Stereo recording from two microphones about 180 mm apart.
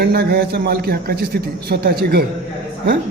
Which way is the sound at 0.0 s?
65° right (ahead or behind).